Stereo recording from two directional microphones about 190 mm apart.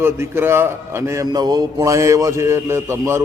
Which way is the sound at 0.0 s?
15° right (ahead or behind).